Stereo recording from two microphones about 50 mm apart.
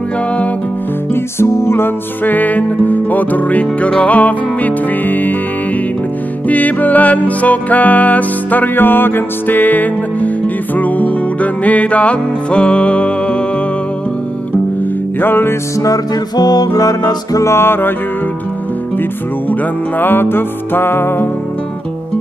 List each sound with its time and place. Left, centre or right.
1.1 s music: left
2.2 s music: left
6.4 s music: left
15.1 s music: left
17.4 s music: left
19.5 s music: left